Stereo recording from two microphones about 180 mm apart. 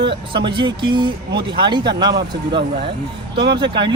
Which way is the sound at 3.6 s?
25° right (ahead or behind).